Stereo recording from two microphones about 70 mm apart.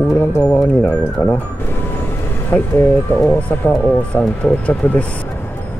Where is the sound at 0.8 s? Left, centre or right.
Left.